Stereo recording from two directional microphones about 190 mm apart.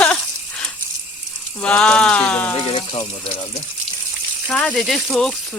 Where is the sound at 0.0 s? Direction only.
5° left (ahead or behind).